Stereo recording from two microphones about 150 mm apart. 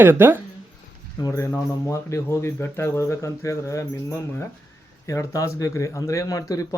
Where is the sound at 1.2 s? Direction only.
20° left (ahead or behind).